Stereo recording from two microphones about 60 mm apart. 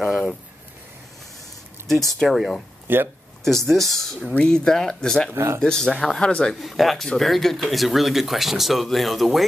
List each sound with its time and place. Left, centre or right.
1.9 s speech: centre
2.9 s a man's voice: right
3.4 s speech: centre
5.3 s speech: right
5.6 s speech: centre
6.6 s speech: centre